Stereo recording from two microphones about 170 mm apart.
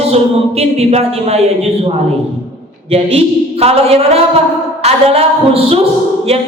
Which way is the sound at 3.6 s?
35° right (ahead or behind).